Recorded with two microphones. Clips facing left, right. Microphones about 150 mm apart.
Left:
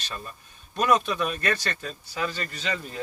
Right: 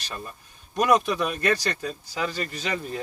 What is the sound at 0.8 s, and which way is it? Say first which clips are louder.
Speech: right 2 dB; 15° right (ahead or behind).